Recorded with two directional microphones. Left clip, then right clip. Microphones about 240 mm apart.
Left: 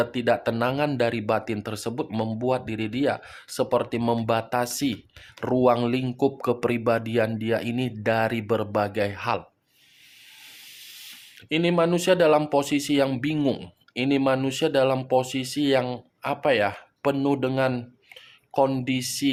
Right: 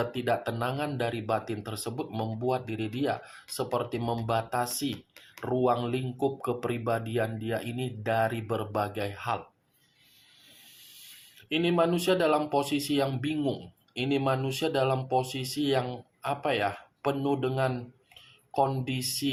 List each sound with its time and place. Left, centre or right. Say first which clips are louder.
0.0 s speech: left 6 dB; left
11.0 s speech: left 7 dB; left